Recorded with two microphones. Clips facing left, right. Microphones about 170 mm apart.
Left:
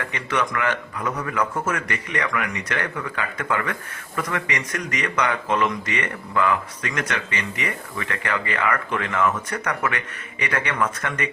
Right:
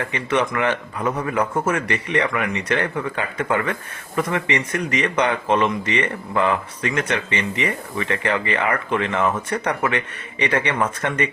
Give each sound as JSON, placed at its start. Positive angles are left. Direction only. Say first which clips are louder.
{"t": 0.3, "sound": "a man's voice", "louder": "right 3 dB", "side_deg": -25}